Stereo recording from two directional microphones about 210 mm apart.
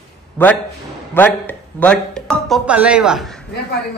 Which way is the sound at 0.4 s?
10° left (ahead or behind).